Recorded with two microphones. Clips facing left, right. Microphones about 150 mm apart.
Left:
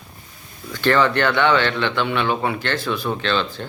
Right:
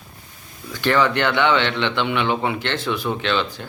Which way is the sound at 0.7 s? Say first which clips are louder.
Left 1 dB; 15° right (ahead or behind).